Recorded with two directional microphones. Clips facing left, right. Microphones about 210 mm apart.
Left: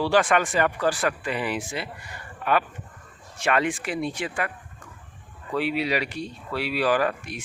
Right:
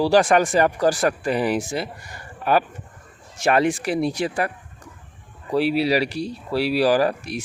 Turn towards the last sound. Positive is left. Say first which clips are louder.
# right 4 dB
turn(degrees=-35)  # may be behind; listen again after turning